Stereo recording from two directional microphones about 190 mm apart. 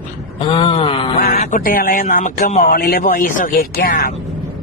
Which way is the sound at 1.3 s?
40° left (ahead or behind).